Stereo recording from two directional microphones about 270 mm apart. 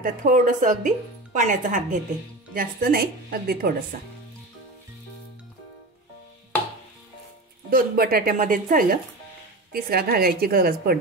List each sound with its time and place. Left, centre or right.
0.0 s a woman's voice: right
7.7 s a woman's voice: right